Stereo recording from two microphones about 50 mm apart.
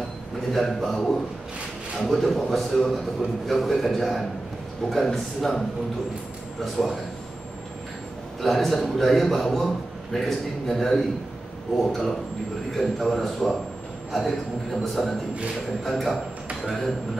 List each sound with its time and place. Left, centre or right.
0.5 s a man's voice: centre
6.6 s a man's voice: centre
8.4 s a man's voice: centre